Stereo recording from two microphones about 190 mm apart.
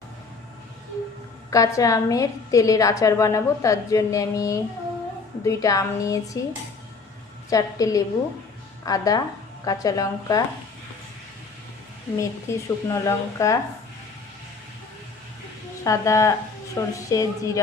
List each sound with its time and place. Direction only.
1.5 s a woman's voice: 20° left (ahead or behind)
7.5 s a woman's voice: 20° left (ahead or behind)
12.1 s a woman's voice: 15° left (ahead or behind)
15.8 s a woman's voice: 15° left (ahead or behind)